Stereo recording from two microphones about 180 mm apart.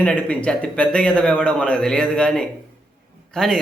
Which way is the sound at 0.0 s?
5° left (ahead or behind).